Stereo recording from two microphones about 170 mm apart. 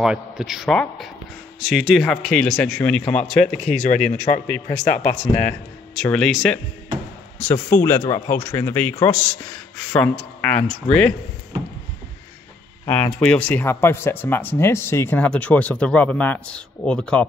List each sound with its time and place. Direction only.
0.0 s speech: 5° right (ahead or behind)
7.7 s speech: 15° left (ahead or behind)
12.8 s speech: 10° left (ahead or behind)